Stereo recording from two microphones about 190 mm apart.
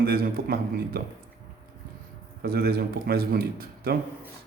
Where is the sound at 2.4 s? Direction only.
55° right (ahead or behind).